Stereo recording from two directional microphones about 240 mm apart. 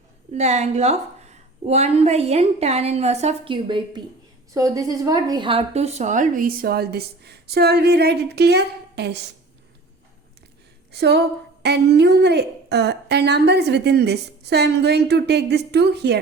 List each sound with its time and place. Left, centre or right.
0.3 s a woman's voice: right
10.9 s a woman's voice: right